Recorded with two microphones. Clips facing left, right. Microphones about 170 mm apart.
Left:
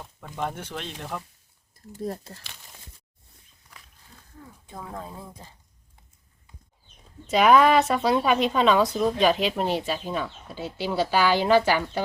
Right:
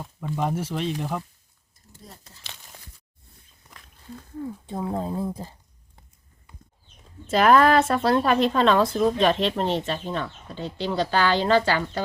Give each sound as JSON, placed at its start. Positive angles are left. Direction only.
{"t": 0.0, "sound": "a woman's voice", "side_deg": -5}
{"t": 2.0, "sound": "speech", "side_deg": 55}
{"t": 4.6, "sound": "speech", "side_deg": -30}
{"t": 7.3, "sound": "a woman's voice", "side_deg": 0}